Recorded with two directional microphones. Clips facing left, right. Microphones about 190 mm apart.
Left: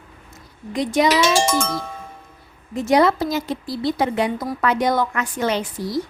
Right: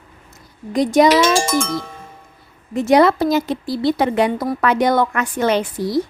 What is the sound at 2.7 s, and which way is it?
A woman's voice, 65° right (ahead or behind).